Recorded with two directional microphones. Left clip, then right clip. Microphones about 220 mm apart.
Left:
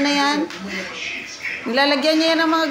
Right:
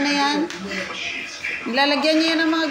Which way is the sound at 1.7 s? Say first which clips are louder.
Left 1 dB; 20° left (ahead or behind).